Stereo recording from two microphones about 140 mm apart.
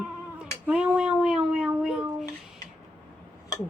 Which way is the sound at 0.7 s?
10° right (ahead or behind).